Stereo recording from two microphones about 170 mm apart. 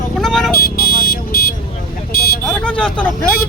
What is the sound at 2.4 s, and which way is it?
Speech, 5° left (ahead or behind).